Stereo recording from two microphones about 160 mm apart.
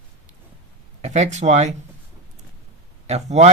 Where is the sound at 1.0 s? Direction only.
45° right (ahead or behind).